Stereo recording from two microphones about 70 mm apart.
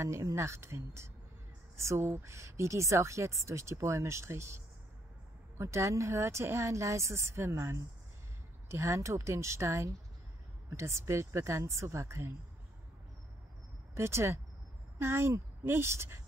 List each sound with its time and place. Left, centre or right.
0.0 s a woman's voice: right
5.6 s speech: right
13.9 s a woman's voice: right